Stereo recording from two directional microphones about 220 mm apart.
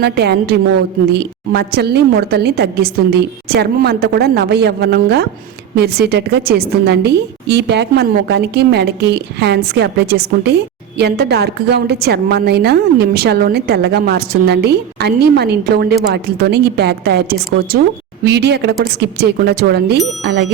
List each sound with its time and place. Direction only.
0.0 s a woman's voice: 45° right (ahead or behind)